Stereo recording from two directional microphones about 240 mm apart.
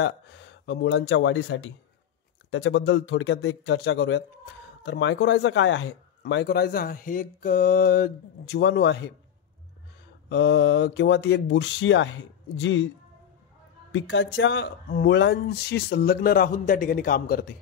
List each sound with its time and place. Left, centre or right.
0.0 s a man's voice: left
10.3 s a man's voice: left
13.9 s speech: left